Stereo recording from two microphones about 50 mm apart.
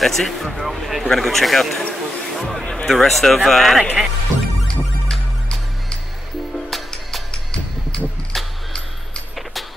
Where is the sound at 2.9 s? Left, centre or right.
Centre.